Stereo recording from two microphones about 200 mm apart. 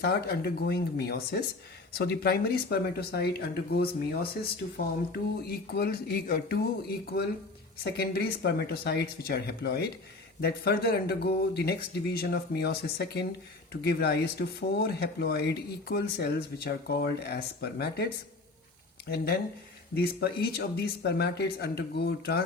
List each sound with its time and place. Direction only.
0.0 s speech: 55° left (ahead or behind)